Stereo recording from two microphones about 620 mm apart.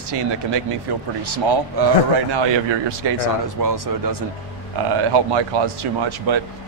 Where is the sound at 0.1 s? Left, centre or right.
Right.